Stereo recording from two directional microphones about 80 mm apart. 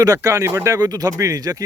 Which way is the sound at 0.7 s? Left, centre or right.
Right.